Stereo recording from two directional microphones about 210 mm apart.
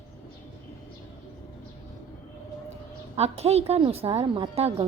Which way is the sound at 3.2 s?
30° right (ahead or behind).